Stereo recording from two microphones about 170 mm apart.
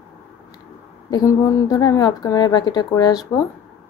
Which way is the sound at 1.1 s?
20° left (ahead or behind).